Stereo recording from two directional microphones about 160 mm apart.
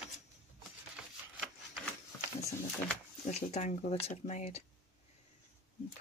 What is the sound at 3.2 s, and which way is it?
Speech, 45° left (ahead or behind).